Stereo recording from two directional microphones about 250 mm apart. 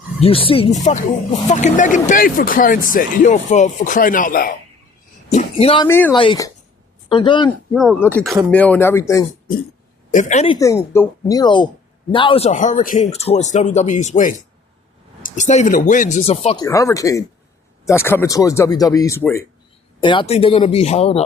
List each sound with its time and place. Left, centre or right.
0.2 s speech: left
7.7 s speech: centre
10.1 s speech: left